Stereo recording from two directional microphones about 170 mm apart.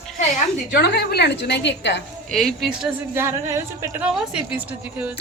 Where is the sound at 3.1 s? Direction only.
15° right (ahead or behind).